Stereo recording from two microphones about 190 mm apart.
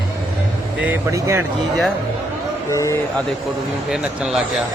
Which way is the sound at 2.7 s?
15° left (ahead or behind).